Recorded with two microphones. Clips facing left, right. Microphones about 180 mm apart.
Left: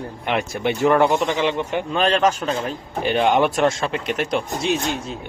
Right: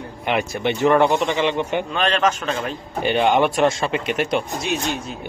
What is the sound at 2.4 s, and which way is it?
Speech, 20° left (ahead or behind).